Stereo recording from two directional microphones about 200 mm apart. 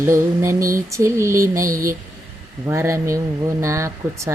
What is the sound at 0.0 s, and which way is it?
Mantra, 15° right (ahead or behind).